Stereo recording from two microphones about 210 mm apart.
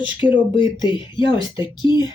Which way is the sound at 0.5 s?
20° left (ahead or behind).